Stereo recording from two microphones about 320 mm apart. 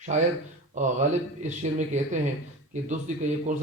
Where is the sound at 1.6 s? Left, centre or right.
Right.